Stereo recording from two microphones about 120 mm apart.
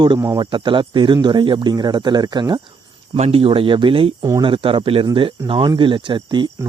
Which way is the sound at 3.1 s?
60° right (ahead or behind).